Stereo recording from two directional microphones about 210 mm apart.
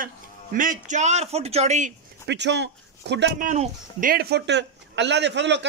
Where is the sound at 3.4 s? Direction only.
35° right (ahead or behind).